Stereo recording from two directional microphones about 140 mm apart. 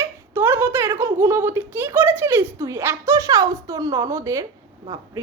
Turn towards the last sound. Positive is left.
turn(degrees=-20)  # may be behind; listen again after turning